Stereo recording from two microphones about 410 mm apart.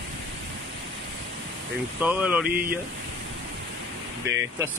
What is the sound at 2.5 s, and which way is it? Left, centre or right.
Speech, right.